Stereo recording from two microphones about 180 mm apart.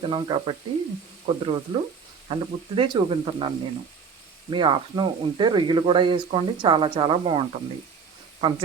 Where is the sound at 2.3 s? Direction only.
30° right (ahead or behind).